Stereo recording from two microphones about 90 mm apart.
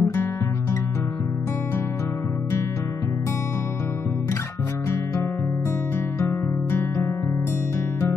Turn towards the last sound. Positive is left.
turn(degrees=30)  # may be behind; listen again after turning